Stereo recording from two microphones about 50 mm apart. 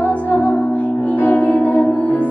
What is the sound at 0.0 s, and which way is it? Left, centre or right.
Music, left.